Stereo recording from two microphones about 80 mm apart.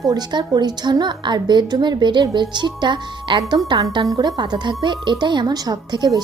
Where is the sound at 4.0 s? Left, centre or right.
Right.